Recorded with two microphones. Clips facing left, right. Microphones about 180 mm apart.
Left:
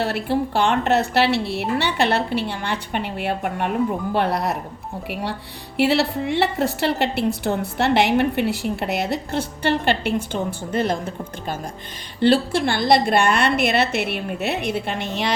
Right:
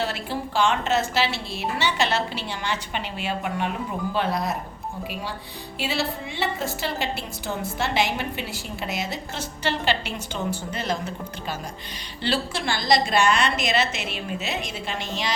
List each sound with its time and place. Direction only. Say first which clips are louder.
0.0 s a woman's voice: left 7 dB; 60° left (ahead or behind)